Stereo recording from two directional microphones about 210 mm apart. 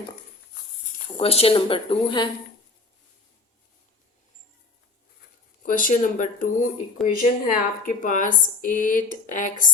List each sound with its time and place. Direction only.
1.1 s speech: 25° left (ahead or behind)
5.6 s speech: 40° left (ahead or behind)